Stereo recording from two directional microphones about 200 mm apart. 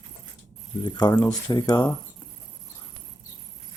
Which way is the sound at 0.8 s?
20° left (ahead or behind).